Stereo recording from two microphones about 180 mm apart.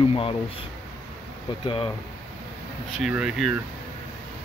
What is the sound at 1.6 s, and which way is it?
Speech, 30° left (ahead or behind).